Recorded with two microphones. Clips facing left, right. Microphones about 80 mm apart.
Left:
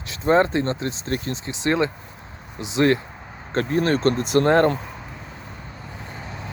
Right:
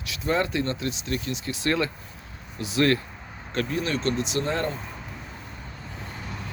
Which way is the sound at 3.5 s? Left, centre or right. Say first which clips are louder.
Left 6 dB; left.